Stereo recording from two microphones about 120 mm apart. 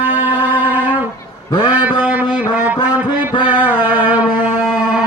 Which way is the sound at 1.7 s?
15° right (ahead or behind).